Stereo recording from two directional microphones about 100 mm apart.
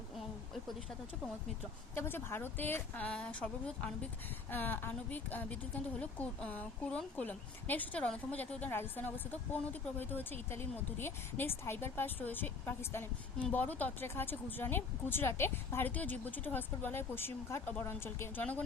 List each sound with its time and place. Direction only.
2.0 s a woman's voice: 25° left (ahead or behind)